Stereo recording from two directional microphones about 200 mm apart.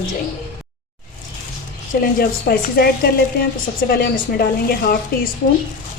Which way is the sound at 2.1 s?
50° left (ahead or behind).